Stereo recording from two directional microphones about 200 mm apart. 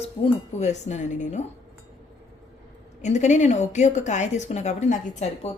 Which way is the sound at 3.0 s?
35° left (ahead or behind).